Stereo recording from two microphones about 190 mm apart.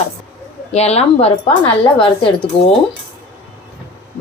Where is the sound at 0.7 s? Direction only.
35° left (ahead or behind).